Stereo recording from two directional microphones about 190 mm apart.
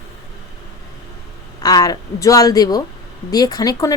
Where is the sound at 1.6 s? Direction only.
20° left (ahead or behind).